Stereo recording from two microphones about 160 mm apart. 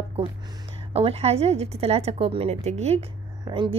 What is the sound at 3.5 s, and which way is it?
Speech, 30° right (ahead or behind).